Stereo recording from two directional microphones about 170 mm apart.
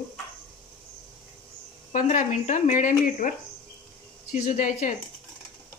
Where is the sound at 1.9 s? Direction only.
50° left (ahead or behind).